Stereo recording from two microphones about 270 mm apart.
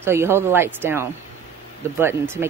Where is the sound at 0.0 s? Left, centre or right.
Centre.